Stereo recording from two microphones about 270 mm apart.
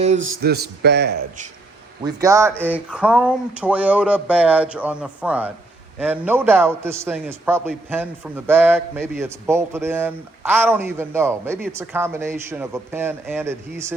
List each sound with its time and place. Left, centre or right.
0.4 s a man's voice: right
2.0 s a man's voice: centre